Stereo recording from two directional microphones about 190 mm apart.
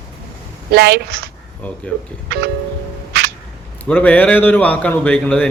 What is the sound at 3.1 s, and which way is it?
Music, 55° right (ahead or behind).